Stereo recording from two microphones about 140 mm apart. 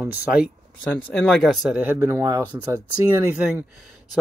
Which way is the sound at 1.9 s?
20° right (ahead or behind).